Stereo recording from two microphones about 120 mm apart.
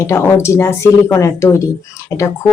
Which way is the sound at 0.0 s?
20° left (ahead or behind).